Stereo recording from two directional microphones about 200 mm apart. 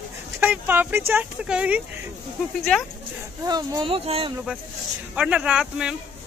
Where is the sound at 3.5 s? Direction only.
20° right (ahead or behind).